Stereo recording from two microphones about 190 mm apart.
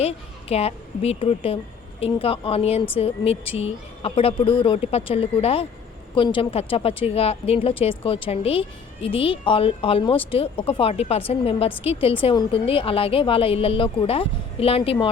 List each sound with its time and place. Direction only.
0.0 s a woman's voice: 30° left (ahead or behind)